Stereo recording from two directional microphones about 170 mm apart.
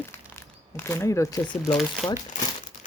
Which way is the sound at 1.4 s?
5° left (ahead or behind).